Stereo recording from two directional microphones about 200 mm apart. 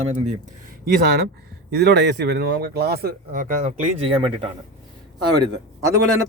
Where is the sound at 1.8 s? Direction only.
55° right (ahead or behind); by 4.5 s 30° right (ahead or behind).